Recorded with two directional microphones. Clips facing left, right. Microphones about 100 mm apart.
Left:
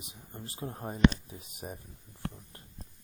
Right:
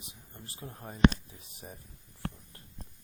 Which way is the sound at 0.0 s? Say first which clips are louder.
Left 5 dB; 20° left (ahead or behind).